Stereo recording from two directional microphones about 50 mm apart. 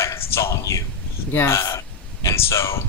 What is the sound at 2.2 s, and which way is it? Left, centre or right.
Speech, left.